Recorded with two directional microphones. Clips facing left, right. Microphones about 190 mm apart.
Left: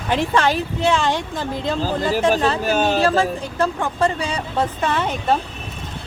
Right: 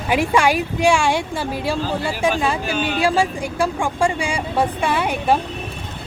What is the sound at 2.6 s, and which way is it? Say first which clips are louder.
Speech: left 4 dB; 45° left (ahead or behind).